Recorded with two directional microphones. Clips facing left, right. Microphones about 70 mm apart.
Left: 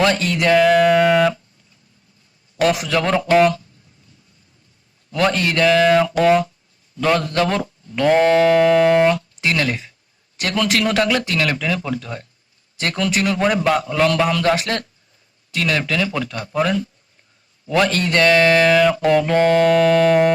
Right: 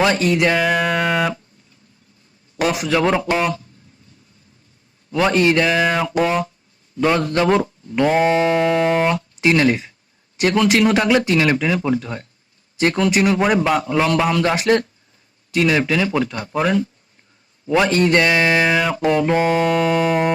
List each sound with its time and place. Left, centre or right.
0.0 s speech: centre
2.6 s speech: centre
5.1 s speech: centre
8.0 s speech: centre